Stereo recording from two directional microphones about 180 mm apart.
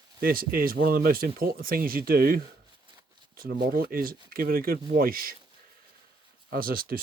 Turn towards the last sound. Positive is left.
turn(degrees=-55)  # may be behind; listen again after turning